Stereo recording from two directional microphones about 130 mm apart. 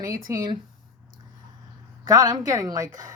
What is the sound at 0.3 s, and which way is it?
Speech, 25° right (ahead or behind).